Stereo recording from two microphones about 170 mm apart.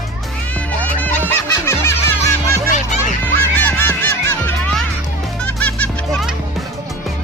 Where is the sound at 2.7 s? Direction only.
50° left (ahead or behind).